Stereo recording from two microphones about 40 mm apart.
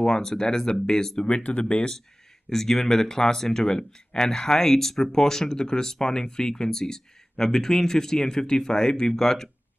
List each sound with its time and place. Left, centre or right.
0.0 s speech: centre
1.4 s speech: left
2.5 s speech: centre